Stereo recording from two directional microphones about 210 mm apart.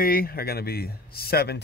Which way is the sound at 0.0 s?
45° left (ahead or behind).